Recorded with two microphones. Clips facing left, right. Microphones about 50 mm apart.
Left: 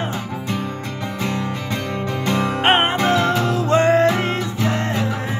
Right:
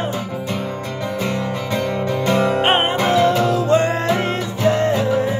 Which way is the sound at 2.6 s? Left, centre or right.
Left.